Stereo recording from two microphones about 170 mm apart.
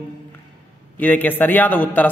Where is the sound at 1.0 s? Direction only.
10° left (ahead or behind).